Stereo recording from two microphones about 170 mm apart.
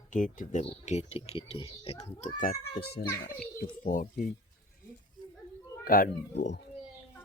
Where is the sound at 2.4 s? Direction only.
55° left (ahead or behind).